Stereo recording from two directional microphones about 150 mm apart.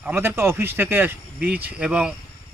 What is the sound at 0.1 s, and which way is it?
Speech, 15° right (ahead or behind).